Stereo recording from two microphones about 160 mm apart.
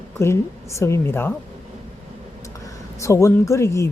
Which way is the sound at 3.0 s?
15° left (ahead or behind).